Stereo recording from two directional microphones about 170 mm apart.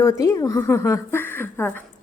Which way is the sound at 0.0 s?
20° left (ahead or behind).